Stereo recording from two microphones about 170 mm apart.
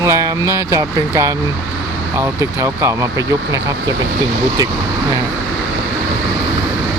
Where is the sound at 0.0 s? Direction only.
15° right (ahead or behind).